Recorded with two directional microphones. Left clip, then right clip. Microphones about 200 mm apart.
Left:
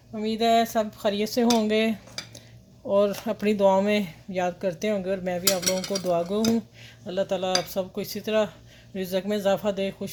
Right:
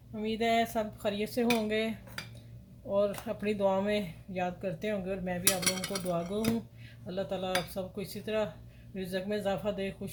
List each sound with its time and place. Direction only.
0.1 s speech: 40° left (ahead or behind)